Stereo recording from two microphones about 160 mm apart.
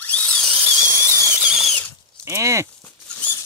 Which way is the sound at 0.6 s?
5° right (ahead or behind).